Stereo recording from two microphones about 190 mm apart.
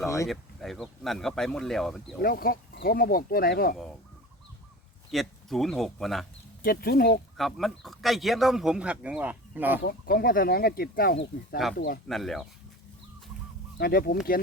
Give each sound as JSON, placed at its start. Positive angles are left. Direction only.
{"t": 0.3, "sound": "speech", "side_deg": 0}
{"t": 2.2, "sound": "speech", "side_deg": 50}
{"t": 5.1, "sound": "speech", "side_deg": 0}
{"t": 6.6, "sound": "speech", "side_deg": 50}
{"t": 7.3, "sound": "speech", "side_deg": 0}
{"t": 9.8, "sound": "speech", "side_deg": 55}
{"t": 11.6, "sound": "speech", "side_deg": 0}
{"t": 13.7, "sound": "speech", "side_deg": 55}